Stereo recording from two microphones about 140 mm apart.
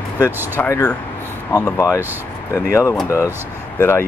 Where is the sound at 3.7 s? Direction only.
15° left (ahead or behind).